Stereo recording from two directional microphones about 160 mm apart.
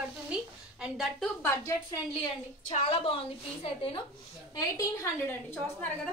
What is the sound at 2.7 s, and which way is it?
A woman's voice, 35° left (ahead or behind).